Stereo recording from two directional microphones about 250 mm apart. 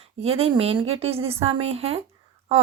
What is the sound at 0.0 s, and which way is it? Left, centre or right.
A woman's voice, right.